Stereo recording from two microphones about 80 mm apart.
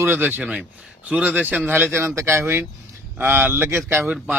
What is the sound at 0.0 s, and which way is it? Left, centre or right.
Speech, right.